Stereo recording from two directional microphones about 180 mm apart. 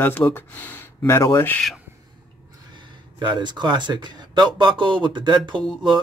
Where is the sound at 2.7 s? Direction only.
25° right (ahead or behind).